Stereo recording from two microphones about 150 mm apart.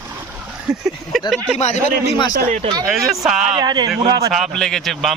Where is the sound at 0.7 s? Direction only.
5° right (ahead or behind).